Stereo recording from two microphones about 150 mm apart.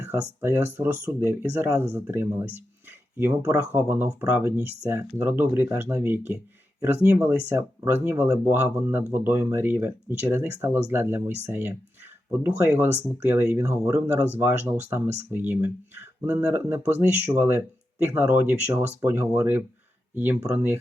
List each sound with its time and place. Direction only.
0.0 s speech: 15° right (ahead or behind)